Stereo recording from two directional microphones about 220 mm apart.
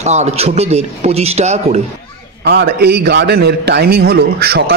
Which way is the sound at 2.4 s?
50° right (ahead or behind).